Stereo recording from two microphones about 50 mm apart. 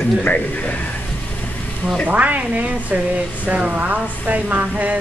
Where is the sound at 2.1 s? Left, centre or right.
Right.